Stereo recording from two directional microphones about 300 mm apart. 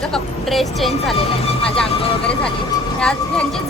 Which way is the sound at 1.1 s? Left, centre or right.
Centre.